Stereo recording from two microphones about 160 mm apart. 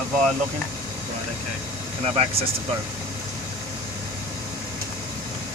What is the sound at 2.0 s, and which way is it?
Speech, 40° right (ahead or behind).